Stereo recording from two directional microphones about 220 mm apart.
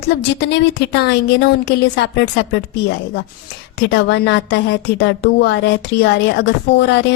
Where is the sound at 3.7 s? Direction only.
50° left (ahead or behind).